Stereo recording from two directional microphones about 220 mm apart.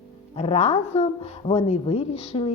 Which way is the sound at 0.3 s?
25° left (ahead or behind).